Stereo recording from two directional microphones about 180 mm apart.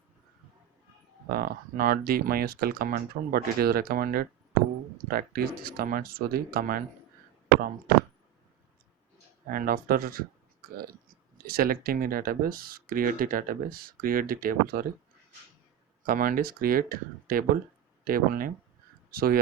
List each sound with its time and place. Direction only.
1.3 s speech: 55° right (ahead or behind)
9.5 s speech: 50° right (ahead or behind)
11.4 s speech: 55° right (ahead or behind)
16.0 s speech: 50° right (ahead or behind)